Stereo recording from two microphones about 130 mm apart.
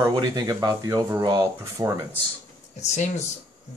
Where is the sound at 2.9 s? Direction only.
65° left (ahead or behind).